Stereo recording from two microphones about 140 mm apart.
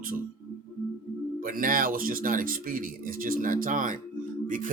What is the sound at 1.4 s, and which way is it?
Speech, 85° right.